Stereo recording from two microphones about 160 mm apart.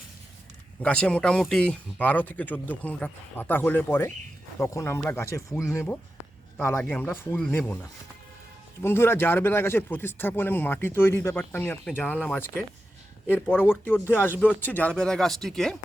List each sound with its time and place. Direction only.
0.8 s speech: 5° left (ahead or behind)